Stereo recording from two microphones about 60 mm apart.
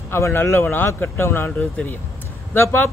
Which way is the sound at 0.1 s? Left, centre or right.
Left.